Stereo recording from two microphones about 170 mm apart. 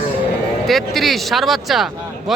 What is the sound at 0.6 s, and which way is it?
Speech, centre (ahead or behind).